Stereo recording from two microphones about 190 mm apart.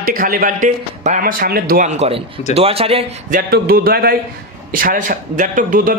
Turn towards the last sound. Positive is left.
turn(degrees=-45)  # may be behind; listen again after turning